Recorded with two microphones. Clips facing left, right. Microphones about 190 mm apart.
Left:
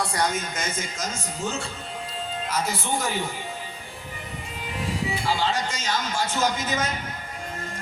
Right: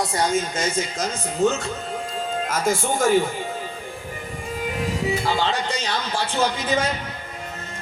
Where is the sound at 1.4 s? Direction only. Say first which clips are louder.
Right 12 dB; 40° right (ahead or behind).